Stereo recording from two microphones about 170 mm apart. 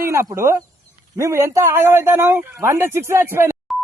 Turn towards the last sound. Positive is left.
turn(degrees=-15)  # may be behind; listen again after turning